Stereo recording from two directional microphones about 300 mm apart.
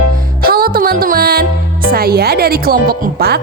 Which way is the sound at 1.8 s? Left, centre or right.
Right.